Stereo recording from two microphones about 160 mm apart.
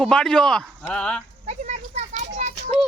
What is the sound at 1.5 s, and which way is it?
Children playing, 45° right (ahead or behind).